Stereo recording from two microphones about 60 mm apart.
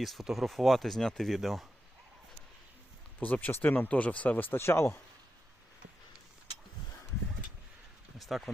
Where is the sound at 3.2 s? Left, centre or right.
Left.